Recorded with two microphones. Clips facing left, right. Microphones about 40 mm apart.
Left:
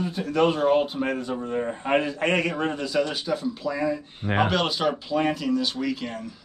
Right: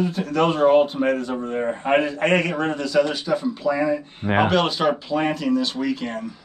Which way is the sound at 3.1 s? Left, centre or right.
Centre.